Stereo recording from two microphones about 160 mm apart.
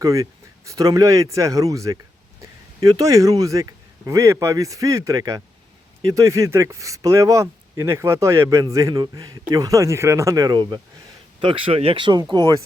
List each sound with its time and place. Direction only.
0.0 s speech: 20° right (ahead or behind)